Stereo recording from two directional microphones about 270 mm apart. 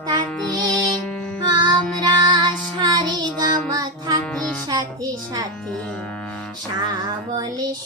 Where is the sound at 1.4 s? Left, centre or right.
Centre.